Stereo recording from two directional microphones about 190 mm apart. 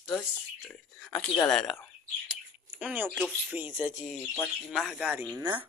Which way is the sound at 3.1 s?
10° right (ahead or behind).